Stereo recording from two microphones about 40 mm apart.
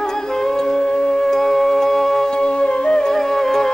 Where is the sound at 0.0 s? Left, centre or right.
Centre.